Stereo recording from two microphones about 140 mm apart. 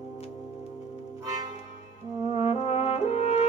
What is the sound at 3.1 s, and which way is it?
French horn, 45° left (ahead or behind).